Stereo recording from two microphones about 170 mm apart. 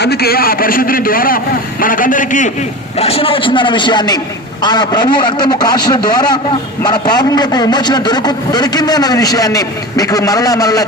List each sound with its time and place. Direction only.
0.0 s a man's voice: 70° left (ahead or behind); by 2.5 s 50° left (ahead or behind)
3.0 s a man's voice: 35° left (ahead or behind)